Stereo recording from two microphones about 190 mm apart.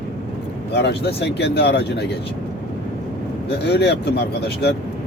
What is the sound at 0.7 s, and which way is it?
Speech, 60° left (ahead or behind).